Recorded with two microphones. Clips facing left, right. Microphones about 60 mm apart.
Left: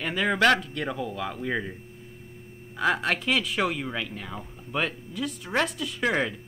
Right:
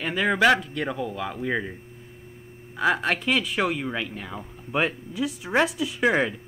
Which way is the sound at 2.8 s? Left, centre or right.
Centre.